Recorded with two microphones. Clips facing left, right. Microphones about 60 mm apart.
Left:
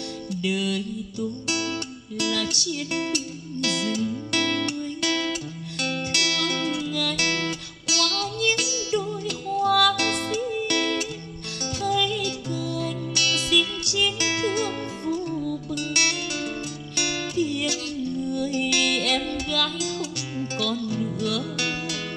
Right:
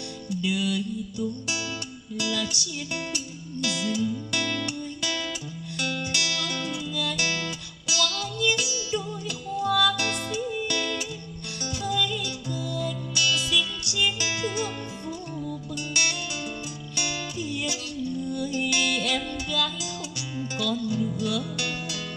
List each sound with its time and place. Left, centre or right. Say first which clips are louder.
0.3 s music: left 1 dB; left
2.9 s speech: left 6 dB; left
3.6 s music: left 1 dB; left